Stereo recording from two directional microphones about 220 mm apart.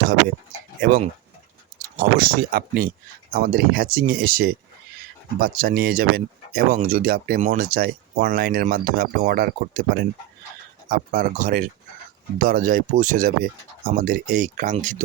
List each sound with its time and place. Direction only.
0.8 s speech: 40° right (ahead or behind)